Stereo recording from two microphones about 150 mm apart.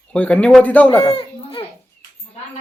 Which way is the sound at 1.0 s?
35° left (ahead or behind).